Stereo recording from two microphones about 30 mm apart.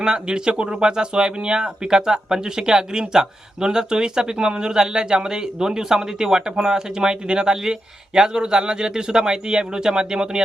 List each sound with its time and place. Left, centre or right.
0.0 s speech: right